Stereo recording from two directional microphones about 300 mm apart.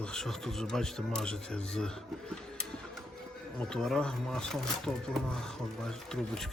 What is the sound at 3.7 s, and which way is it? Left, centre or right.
Speech, centre.